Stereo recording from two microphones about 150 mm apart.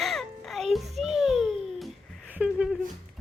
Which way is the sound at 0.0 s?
Centre (ahead or behind).